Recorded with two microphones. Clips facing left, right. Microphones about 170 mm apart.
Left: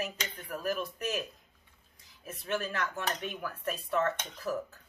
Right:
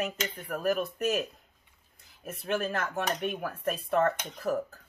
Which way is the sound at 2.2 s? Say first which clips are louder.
Right 4 dB; 50° right (ahead or behind).